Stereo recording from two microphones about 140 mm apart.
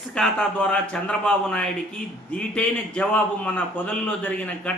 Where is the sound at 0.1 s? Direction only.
5° left (ahead or behind).